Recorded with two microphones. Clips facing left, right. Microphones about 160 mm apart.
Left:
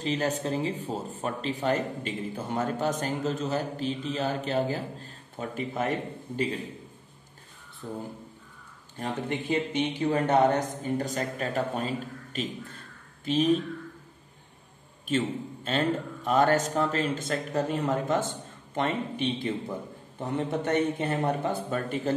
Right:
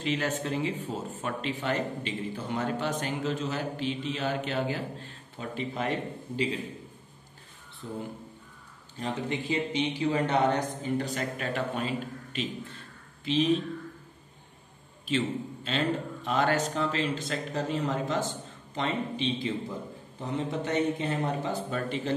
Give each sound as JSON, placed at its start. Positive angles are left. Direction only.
{"t": 0.0, "sound": "speech", "side_deg": 35}
{"t": 7.8, "sound": "speech", "side_deg": 40}
{"t": 15.0, "sound": "a man's voice", "side_deg": 45}